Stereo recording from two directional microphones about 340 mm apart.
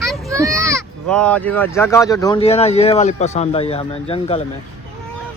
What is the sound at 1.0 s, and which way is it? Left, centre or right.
Speech, centre.